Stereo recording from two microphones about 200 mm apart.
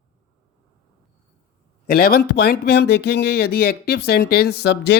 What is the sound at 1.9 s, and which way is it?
Speech, 45° left (ahead or behind).